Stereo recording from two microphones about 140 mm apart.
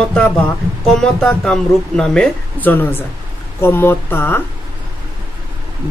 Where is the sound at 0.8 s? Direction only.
5° left (ahead or behind).